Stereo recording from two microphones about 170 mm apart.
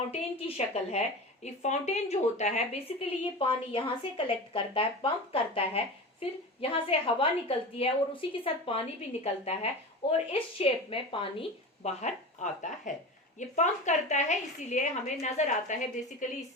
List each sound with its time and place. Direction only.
0.1 s a woman's voice: 35° left (ahead or behind)